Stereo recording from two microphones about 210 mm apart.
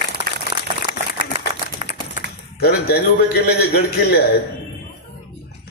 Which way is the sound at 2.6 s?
50° left (ahead or behind).